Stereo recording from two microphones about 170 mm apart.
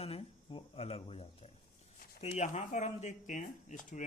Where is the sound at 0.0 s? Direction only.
35° left (ahead or behind).